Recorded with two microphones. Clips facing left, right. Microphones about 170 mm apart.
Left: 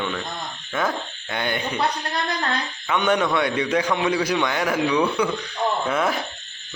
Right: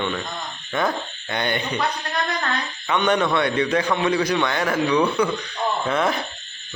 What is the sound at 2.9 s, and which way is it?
A man's voice, 10° left (ahead or behind).